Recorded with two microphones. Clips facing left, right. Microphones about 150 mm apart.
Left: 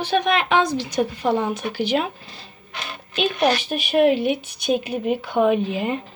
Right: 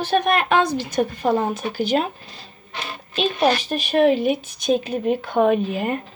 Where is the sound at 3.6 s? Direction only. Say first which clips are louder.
Even; 10° left (ahead or behind).